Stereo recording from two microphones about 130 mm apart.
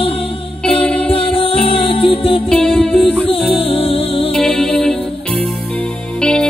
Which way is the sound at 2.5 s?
10° left (ahead or behind).